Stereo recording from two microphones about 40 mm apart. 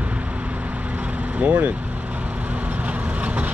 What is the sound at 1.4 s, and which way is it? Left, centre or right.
Speech, right.